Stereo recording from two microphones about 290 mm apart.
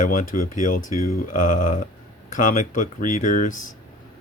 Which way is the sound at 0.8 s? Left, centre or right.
Left.